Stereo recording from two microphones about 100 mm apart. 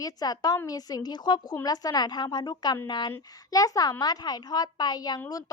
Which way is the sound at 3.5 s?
35° left (ahead or behind).